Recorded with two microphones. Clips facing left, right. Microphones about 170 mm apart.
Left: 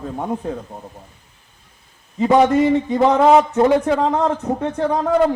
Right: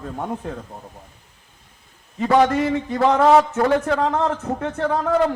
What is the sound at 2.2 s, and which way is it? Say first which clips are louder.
A man's voice: left 3 dB; 20° left (ahead or behind).